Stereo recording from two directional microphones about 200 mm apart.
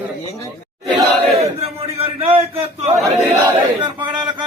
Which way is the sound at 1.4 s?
30° right (ahead or behind).